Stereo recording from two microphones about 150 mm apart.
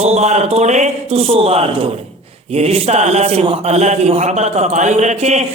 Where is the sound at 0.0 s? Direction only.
45° right (ahead or behind).